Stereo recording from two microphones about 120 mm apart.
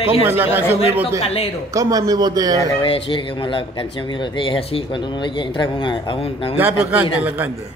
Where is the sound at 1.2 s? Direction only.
55° left (ahead or behind).